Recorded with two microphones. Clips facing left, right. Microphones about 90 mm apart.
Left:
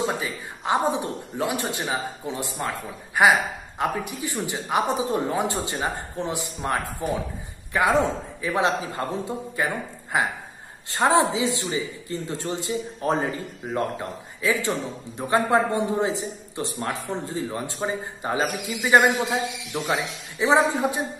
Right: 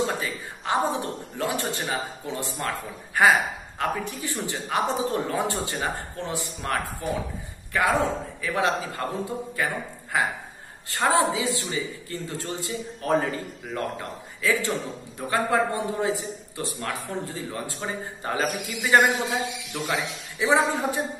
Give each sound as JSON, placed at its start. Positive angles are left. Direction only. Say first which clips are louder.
{"t": 0.0, "sound": "a sound", "louder": "even", "side_deg": 15}
{"t": 1.4, "sound": "a man's voice", "louder": "left 1 dB", "side_deg": 15}
{"t": 8.4, "sound": "a man's voice", "louder": "left 2 dB", "side_deg": 20}